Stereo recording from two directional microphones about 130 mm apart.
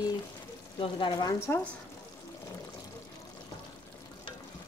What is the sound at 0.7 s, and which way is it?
Speech, 40° left (ahead or behind).